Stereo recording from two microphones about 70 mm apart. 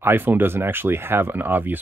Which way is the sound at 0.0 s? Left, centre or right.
Right.